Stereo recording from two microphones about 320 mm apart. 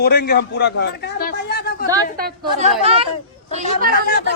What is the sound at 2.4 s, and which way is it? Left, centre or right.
A woman's voice, centre.